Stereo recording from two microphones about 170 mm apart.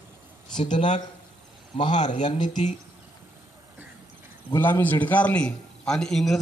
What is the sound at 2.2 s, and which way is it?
Speech, 25° left (ahead or behind).